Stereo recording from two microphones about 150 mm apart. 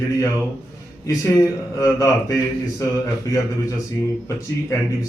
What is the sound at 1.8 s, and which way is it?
Speech, 20° left (ahead or behind).